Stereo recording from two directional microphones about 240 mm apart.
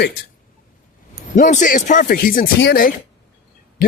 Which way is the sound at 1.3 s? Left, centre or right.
Left.